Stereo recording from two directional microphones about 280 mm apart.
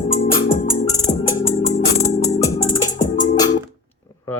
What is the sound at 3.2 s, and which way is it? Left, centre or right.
Music, centre.